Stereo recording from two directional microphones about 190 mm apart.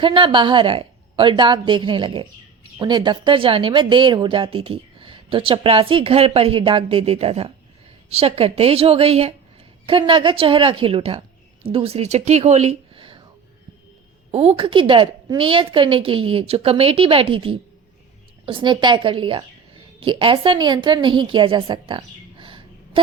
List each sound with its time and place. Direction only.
0.0 s a woman's voice: 25° right (ahead or behind)
14.3 s a woman's voice: 30° right (ahead or behind)